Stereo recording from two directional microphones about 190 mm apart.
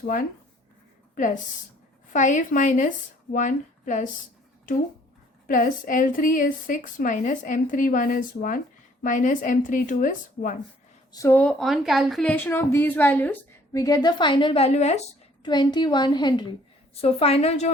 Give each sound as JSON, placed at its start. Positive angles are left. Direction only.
{"t": 0.0, "sound": "a woman's voice", "side_deg": 50}
{"t": 5.5, "sound": "speech", "side_deg": 45}
{"t": 11.1, "sound": "speech", "side_deg": 15}
{"t": 15.4, "sound": "a woman's voice", "side_deg": 25}